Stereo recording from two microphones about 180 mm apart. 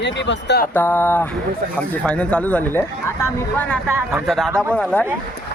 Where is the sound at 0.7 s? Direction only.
10° left (ahead or behind).